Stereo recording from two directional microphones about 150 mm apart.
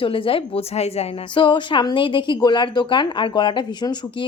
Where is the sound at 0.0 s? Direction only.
35° left (ahead or behind).